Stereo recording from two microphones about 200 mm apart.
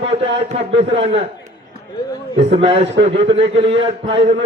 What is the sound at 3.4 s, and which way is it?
Speech, 60° right (ahead or behind).